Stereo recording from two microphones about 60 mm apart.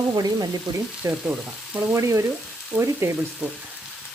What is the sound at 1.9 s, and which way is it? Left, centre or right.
Frying, right.